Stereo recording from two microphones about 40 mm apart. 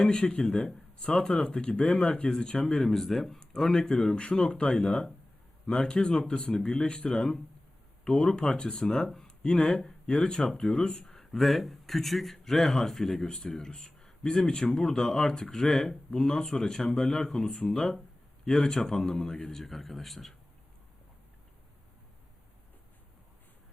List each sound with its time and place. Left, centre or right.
0.0 s speech: left
2.9 s a man's voice: centre
3.4 s speech: centre
11.2 s a man's voice: centre